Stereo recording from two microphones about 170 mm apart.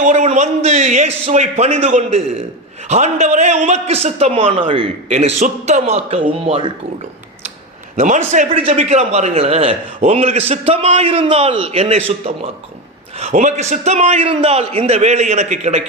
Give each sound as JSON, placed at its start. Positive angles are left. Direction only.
{"t": 0.0, "sound": "a man's voice", "side_deg": -45}
{"t": 5.0, "sound": "a man's voice", "side_deg": -40}
{"t": 7.9, "sound": "a man's voice", "side_deg": -45}